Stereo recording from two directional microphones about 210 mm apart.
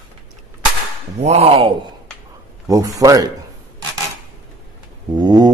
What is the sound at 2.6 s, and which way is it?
Speech, 15° right (ahead or behind).